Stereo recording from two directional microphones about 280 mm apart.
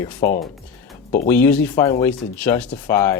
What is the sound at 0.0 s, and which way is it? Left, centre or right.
Speech, centre.